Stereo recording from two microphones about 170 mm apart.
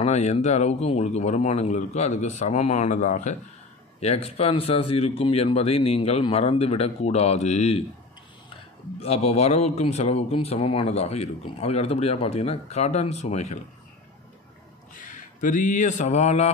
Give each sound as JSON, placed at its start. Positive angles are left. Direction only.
{"t": 0.0, "sound": "speech", "side_deg": 40}
{"t": 9.0, "sound": "speech", "side_deg": 40}
{"t": 15.0, "sound": "speech", "side_deg": 50}